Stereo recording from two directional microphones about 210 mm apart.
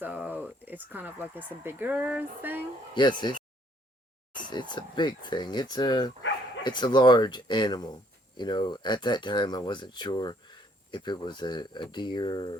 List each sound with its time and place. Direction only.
0.0 s speech: 10° right (ahead or behind)
2.9 s speech: 20° left (ahead or behind)
4.4 s speech: 20° left (ahead or behind)